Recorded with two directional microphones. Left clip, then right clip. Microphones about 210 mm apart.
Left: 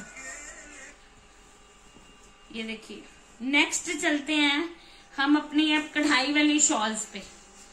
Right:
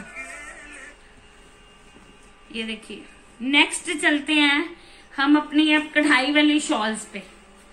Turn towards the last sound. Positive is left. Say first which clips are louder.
# right 3 dB
turn(degrees=10)  # may be behind; listen again after turning